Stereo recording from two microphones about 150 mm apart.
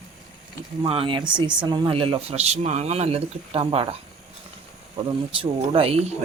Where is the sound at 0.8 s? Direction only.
35° right (ahead or behind).